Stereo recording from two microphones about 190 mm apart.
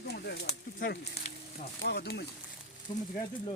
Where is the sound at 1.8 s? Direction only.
60° left (ahead or behind).